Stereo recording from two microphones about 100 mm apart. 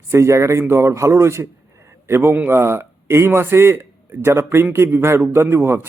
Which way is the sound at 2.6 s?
25° right (ahead or behind).